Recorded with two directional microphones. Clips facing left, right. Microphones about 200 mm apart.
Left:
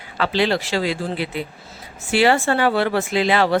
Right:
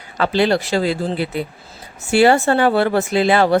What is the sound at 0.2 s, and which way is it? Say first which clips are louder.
Speech: right 3 dB; 45° right (ahead or behind).